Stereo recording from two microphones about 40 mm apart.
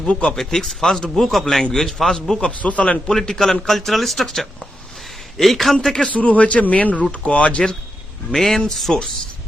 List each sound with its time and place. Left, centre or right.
0.0 s a man's voice: left
0.3 s a man's voice: centre
2.6 s a man's voice: left
3.1 s a man's voice: centre
5.7 s a man's voice: centre
6.1 s a man's voice: left
8.3 s a man's voice: centre